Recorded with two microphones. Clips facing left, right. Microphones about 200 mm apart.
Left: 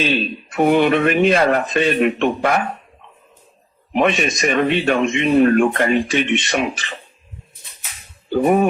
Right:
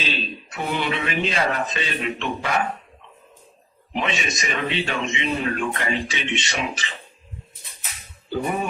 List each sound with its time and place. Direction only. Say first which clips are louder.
0.0 s speech: left 9 dB; 55° left (ahead or behind)
3.9 s a man's voice: left 9 dB; 50° left (ahead or behind)
8.3 s speech: left 10 dB; 55° left (ahead or behind)